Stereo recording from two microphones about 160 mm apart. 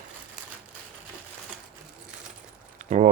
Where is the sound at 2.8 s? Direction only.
55° right (ahead or behind).